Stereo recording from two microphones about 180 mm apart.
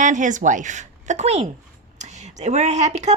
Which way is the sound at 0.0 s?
45° right (ahead or behind).